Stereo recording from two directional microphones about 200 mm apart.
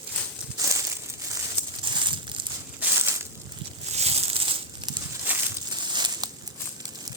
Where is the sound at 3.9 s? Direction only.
30° right (ahead or behind).